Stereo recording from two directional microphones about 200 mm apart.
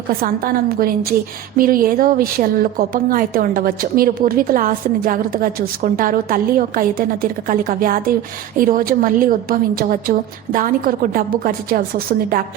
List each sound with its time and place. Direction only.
0.2 s a woman's voice: 45° right (ahead or behind)